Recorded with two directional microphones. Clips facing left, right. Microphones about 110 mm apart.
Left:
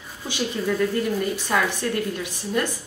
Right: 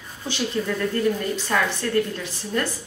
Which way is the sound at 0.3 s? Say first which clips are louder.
Even; 10° left (ahead or behind).